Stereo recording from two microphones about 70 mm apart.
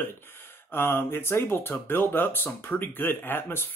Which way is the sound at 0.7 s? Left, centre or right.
Left.